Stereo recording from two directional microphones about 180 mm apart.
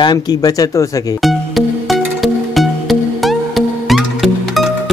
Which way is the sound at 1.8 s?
Centre (ahead or behind).